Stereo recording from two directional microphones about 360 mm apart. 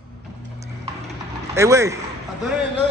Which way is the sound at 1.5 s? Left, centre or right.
Centre.